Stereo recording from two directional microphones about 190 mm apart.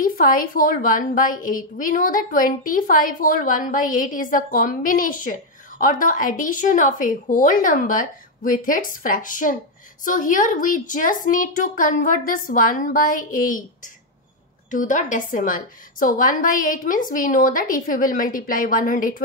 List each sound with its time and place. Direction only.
0.0 s a woman's voice: 45° left (ahead or behind)
14.7 s a woman's voice: 40° left (ahead or behind)